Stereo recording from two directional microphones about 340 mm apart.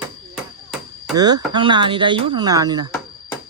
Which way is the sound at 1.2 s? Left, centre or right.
Centre.